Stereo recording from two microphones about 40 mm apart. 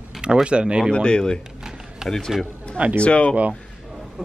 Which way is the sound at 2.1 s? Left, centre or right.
Centre.